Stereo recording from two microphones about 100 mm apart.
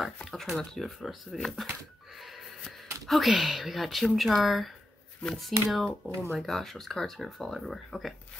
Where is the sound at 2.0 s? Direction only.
Centre (ahead or behind).